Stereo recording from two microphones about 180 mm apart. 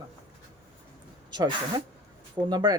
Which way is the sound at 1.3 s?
25° right (ahead or behind).